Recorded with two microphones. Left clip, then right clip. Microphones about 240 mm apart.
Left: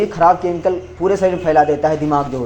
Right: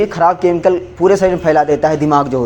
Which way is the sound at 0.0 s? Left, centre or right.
Right.